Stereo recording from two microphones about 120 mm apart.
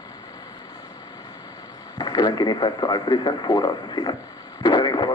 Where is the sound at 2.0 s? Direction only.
35° left (ahead or behind).